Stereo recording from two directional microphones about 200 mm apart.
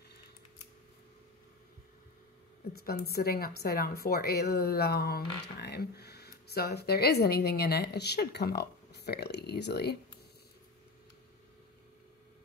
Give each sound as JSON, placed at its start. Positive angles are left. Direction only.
{"t": 2.8, "sound": "a woman's voice", "side_deg": 50}